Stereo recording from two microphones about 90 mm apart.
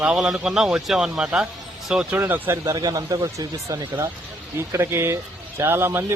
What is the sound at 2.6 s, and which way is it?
A man's voice, 45° right (ahead or behind).